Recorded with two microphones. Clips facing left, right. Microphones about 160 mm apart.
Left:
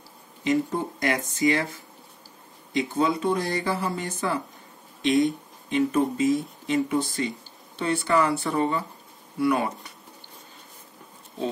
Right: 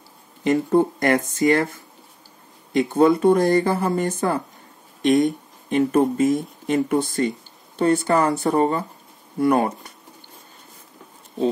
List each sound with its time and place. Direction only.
0.4 s speech: 55° right (ahead or behind)